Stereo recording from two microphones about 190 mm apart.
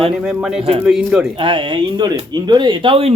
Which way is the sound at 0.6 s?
30° right (ahead or behind).